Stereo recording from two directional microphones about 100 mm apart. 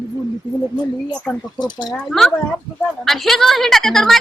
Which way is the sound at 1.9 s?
5° left (ahead or behind).